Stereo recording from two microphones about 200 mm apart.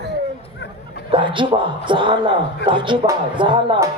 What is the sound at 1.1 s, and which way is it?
A woman's voice, 25° right (ahead or behind).